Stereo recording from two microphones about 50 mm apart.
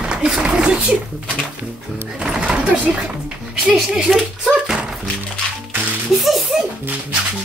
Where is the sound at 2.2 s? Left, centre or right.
Centre.